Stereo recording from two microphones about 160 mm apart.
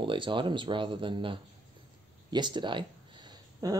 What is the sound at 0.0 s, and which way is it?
Speech, 30° right (ahead or behind).